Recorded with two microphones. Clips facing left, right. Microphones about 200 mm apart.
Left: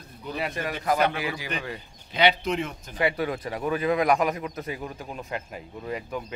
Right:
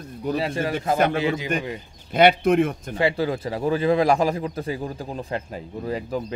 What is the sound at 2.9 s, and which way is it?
A man's voice, 30° right (ahead or behind).